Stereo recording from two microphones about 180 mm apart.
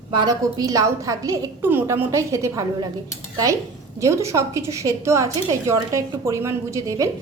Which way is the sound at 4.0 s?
15° right (ahead or behind).